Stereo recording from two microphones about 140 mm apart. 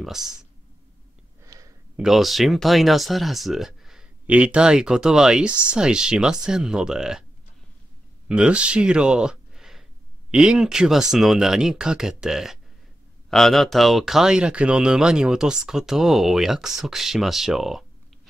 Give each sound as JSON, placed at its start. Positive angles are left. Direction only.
{"t": 0.0, "sound": "speech", "side_deg": -5}
{"t": 1.4, "sound": "a sound", "side_deg": -25}
{"t": 2.0, "sound": "speech", "side_deg": 0}
{"t": 8.3, "sound": "speech", "side_deg": -10}